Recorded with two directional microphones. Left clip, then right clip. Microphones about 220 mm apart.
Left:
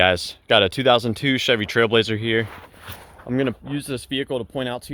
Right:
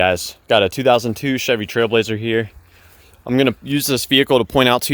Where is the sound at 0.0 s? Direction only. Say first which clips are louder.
Right 1 dB; 5° right (ahead or behind).